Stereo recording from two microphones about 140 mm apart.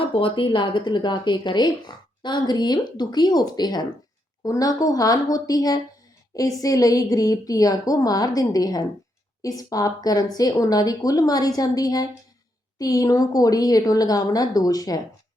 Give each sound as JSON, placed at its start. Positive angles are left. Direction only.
{"t": 0.1, "sound": "a woman's voice", "side_deg": 35}